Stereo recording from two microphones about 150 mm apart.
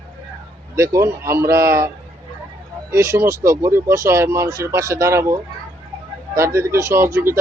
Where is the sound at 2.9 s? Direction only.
20° right (ahead or behind).